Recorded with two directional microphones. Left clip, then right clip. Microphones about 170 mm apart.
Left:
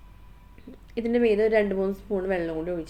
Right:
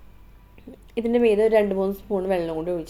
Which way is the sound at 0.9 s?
15° right (ahead or behind).